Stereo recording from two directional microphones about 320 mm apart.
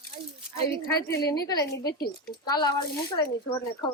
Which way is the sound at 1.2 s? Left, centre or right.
Centre.